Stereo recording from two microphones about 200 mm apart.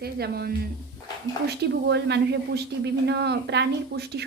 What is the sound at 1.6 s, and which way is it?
Speech, 60° right (ahead or behind).